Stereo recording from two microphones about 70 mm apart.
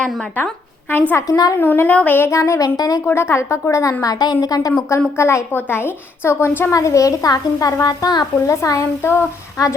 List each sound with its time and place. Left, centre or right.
0.9 s a woman's voice: left
2.3 s speech: left
2.7 s a woman's voice: left
3.1 s speech: left
4.0 s a woman's voice: left
4.9 s speech: left
5.5 s a woman's voice: left
6.7 s a woman's voice: left
8.4 s speech: left